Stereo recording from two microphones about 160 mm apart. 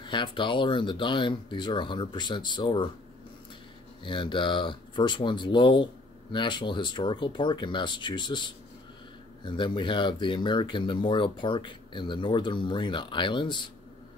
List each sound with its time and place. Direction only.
0.0 s speech: 30° left (ahead or behind)
4.0 s speech: 30° left (ahead or behind)